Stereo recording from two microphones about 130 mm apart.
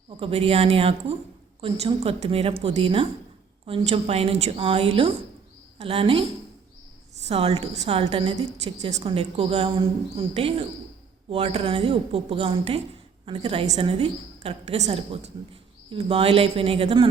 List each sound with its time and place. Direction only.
0.2 s speech: 45° right (ahead or behind)
7.3 s speech: 50° right (ahead or behind)
8.4 s a woman's voice: 60° right (ahead or behind)
15.9 s speech: 45° right (ahead or behind)